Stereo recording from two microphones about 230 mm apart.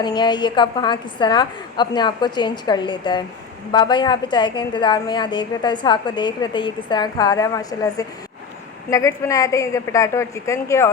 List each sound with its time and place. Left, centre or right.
0.0 s a woman's voice: centre